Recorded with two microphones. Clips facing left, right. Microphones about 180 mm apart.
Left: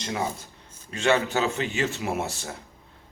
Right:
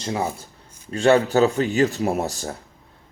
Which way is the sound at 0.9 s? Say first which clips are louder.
Right 6 dB; 35° right (ahead or behind).